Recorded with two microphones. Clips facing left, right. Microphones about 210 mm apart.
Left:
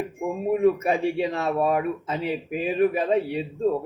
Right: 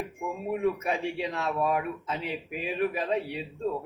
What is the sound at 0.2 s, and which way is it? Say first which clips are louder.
Speech: left 8 dB; 45° left (ahead or behind).